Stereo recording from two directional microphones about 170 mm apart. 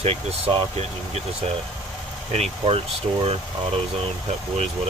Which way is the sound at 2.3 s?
35° right (ahead or behind).